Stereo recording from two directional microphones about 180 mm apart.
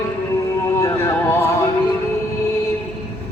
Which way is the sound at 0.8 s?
20° left (ahead or behind).